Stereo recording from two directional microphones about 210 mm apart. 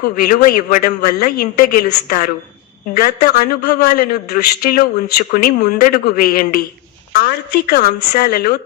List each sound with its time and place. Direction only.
0.0 s a man's voice: 45° left (ahead or behind)